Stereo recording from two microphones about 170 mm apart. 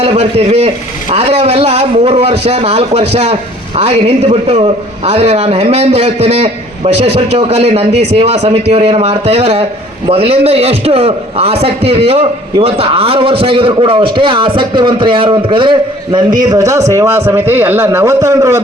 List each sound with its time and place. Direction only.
0.0 s a man's voice: 35° right (ahead or behind); by 18.6 s 20° right (ahead or behind)